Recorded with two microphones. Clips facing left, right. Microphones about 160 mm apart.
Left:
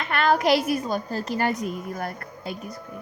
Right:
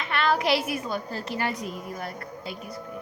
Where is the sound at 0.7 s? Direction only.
40° left (ahead or behind).